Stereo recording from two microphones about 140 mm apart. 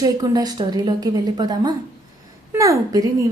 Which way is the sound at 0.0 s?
30° right (ahead or behind).